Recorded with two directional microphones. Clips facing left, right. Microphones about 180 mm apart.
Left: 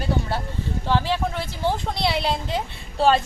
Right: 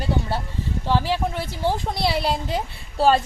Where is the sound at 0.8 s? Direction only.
10° right (ahead or behind).